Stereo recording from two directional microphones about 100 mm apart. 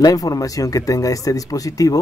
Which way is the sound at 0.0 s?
35° left (ahead or behind).